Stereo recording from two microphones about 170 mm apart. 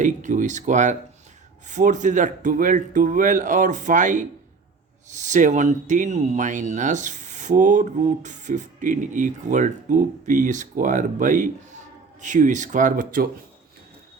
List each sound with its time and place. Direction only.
0.0 s speech: 45° right (ahead or behind)